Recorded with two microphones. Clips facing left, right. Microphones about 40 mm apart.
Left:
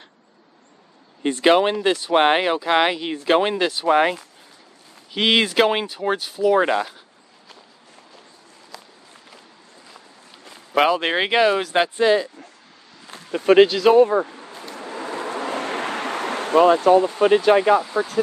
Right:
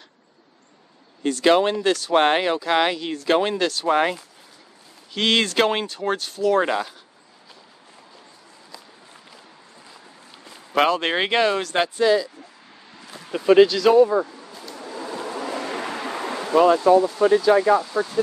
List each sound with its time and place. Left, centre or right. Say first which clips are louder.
1.2 s speech: left 1 dB; left
10.4 s speech: left 1 dB; centre
12.0 s speech: even; left
13.7 s speech: left 2 dB; centre
13.9 s a sound: left 1 dB; left
17.7 s speech: left 1 dB; centre